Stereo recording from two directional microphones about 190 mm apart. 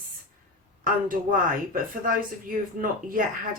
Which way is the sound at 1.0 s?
45° right (ahead or behind).